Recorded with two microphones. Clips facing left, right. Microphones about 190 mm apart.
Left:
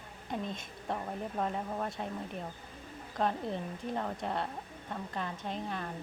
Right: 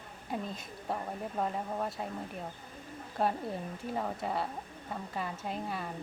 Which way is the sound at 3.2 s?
5° right (ahead or behind).